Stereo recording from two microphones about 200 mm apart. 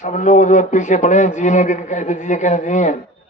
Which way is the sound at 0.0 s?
40° left (ahead or behind).